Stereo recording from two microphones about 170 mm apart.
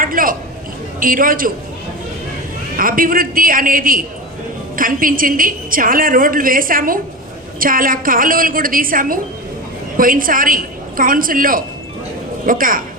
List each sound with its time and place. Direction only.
0.0 s a sound: 55° right (ahead or behind)
0.9 s a woman's voice: 55° right (ahead or behind)
2.7 s a woman's voice: 55° right (ahead or behind)